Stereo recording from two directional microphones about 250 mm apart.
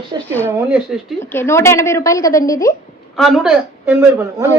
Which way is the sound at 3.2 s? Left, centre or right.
Centre.